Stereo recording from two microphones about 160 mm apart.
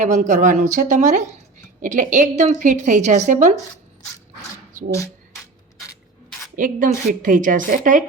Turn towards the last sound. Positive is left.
turn(degrees=-55)  # may be behind; listen again after turning